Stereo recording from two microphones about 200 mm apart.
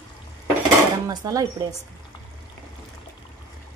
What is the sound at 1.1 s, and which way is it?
Speech, 15° right (ahead or behind).